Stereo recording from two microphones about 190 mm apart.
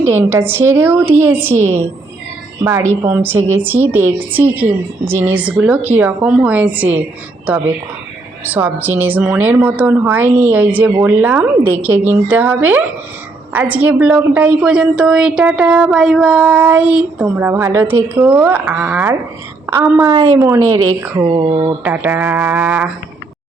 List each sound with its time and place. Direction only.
0.0 s a woman's voice: 15° right (ahead or behind)
3.0 s a woman's voice: 10° right (ahead or behind)
8.4 s a woman's voice: 10° right (ahead or behind)
21.2 s a sound: 25° right (ahead or behind)
21.8 s a woman's voice: 10° right (ahead or behind)